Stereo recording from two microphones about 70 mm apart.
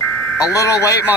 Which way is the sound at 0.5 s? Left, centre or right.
Left.